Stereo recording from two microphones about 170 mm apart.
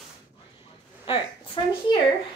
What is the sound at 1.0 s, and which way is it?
Speech, 30° left (ahead or behind).